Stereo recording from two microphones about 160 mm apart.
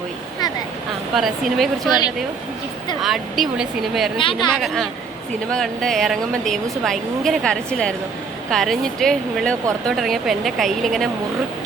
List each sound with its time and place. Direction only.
1.1 s a woman's voice: centre (ahead or behind)
3.0 s a woman's voice: centre (ahead or behind)
4.2 s speech: 30° left (ahead or behind)
4.5 s a woman's voice: 5° left (ahead or behind)